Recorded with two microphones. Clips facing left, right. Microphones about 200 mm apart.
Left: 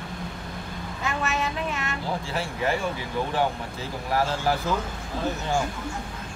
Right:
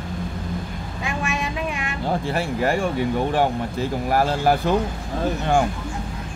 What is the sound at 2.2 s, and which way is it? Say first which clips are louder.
Speech: right 5 dB; 60° right (ahead or behind).